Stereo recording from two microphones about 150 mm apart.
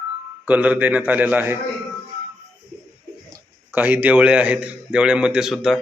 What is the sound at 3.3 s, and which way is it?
A man's voice, 10° right (ahead or behind).